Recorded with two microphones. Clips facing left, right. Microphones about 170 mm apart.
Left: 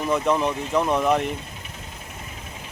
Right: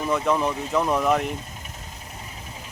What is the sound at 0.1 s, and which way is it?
Speech, centre (ahead or behind).